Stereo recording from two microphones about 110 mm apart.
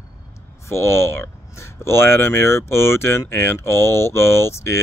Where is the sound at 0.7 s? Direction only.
25° left (ahead or behind).